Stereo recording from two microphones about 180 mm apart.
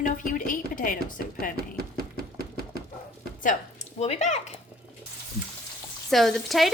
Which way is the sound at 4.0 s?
40° left (ahead or behind).